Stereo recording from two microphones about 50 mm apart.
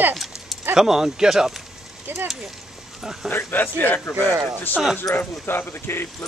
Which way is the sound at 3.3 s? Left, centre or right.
Left.